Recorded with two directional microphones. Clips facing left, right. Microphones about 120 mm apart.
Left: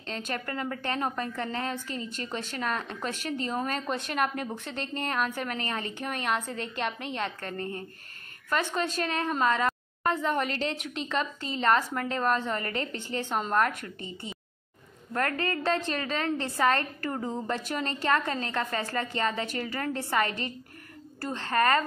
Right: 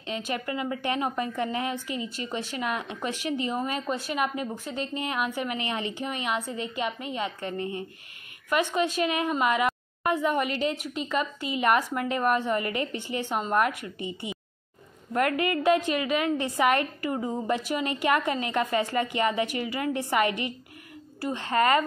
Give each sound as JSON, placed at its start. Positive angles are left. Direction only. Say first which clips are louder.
{"t": 0.3, "sound": "a woman's voice", "louder": "right 2 dB", "side_deg": -10}